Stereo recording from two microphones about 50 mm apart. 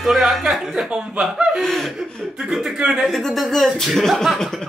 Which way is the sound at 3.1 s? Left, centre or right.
Centre.